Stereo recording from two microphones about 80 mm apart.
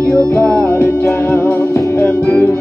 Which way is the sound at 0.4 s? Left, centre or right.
Right.